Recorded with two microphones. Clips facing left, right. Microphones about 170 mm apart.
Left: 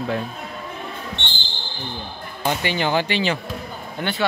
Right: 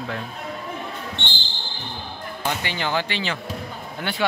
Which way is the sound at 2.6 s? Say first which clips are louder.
Left 6 dB; 15° left (ahead or behind).